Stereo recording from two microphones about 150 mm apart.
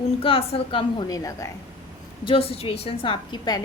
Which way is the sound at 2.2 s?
40° left (ahead or behind).